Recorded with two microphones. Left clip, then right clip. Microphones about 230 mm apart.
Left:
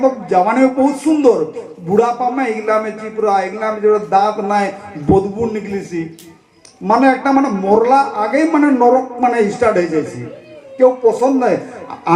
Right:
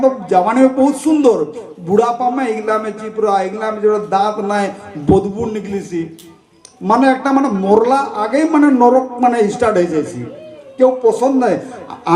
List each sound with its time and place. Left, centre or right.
0.0 s a man's voice: right